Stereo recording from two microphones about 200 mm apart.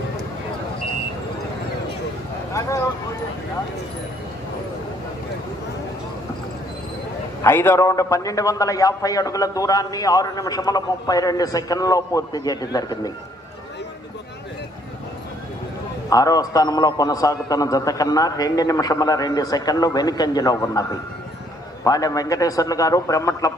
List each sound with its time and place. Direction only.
2.5 s speech: 15° left (ahead or behind)
7.4 s a man's voice: 10° left (ahead or behind)
16.0 s a man's voice: 15° left (ahead or behind)
21.8 s a man's voice: 15° left (ahead or behind)